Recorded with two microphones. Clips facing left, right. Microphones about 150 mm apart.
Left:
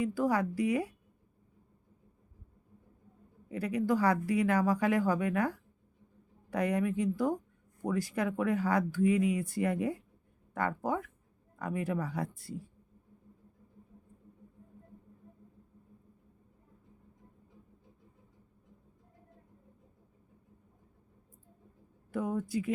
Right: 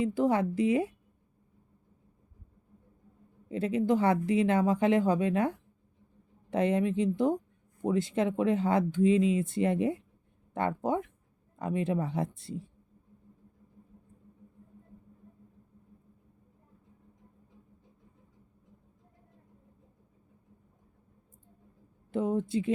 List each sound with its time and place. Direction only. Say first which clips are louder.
0.0 s speech: right 3 dB; 20° right (ahead or behind)
3.5 s speech: right 3 dB; 25° right (ahead or behind)
22.1 s speech: right 4 dB; 25° right (ahead or behind)